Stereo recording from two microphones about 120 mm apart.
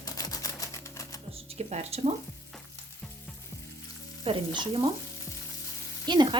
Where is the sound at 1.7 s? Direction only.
60° right (ahead or behind).